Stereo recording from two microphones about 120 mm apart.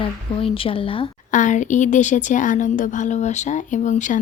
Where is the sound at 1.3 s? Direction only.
90° left.